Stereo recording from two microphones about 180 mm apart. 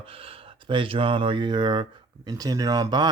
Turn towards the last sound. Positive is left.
turn(degrees=-20)  # may be behind; listen again after turning